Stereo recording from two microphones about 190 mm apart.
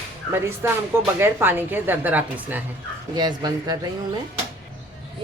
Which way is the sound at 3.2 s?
20° right (ahead or behind).